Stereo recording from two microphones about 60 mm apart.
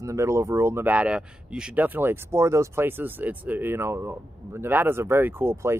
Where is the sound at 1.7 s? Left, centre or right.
Right.